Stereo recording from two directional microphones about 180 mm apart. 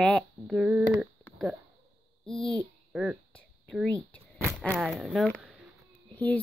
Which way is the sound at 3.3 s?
5° left (ahead or behind).